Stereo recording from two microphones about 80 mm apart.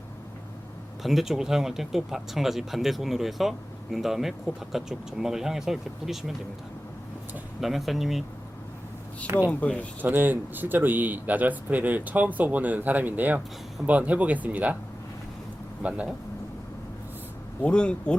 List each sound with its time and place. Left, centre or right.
1.0 s speech: centre
7.6 s speech: centre
9.5 s speech: centre
10.0 s speech: right
15.8 s speech: centre
17.6 s speech: centre